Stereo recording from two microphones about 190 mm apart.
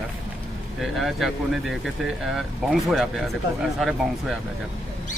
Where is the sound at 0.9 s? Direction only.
Centre (ahead or behind).